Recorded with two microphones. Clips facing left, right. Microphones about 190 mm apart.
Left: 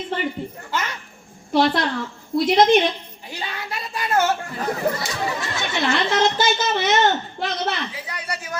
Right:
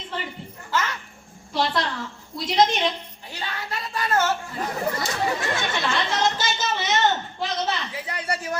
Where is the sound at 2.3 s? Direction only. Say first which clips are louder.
Left 6 dB; 60° left (ahead or behind).